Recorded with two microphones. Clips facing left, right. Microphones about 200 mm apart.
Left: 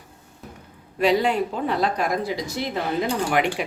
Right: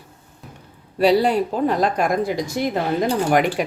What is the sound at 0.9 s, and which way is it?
Speech, 35° right (ahead or behind).